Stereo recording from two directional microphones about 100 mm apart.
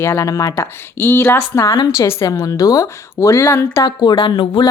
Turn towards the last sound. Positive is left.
turn(degrees=50)  # may be behind; listen again after turning